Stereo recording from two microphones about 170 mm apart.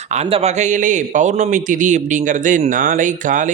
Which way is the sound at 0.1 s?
35° right (ahead or behind).